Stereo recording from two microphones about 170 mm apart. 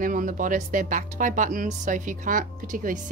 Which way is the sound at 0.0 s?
50° right (ahead or behind).